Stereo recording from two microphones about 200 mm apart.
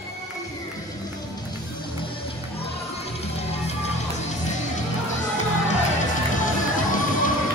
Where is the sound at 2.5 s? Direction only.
30° left (ahead or behind).